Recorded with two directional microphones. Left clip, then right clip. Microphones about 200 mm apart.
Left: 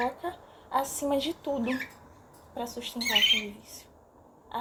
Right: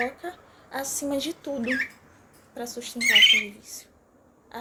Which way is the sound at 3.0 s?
30° right (ahead or behind).